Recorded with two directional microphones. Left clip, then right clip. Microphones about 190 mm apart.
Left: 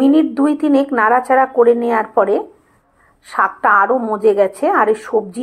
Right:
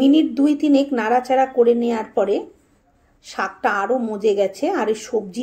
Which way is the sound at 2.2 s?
25° left (ahead or behind).